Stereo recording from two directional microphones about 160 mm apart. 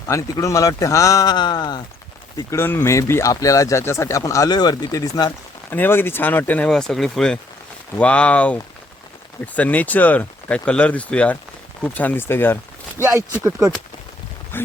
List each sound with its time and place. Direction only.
0.1 s speech: 20° left (ahead or behind)
2.5 s speech: 15° left (ahead or behind)
13.0 s speech: 15° right (ahead or behind)
14.5 s speech: 15° left (ahead or behind)